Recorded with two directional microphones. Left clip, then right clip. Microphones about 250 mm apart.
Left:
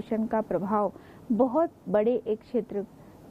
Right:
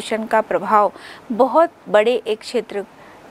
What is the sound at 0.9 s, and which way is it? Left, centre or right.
Speech, right.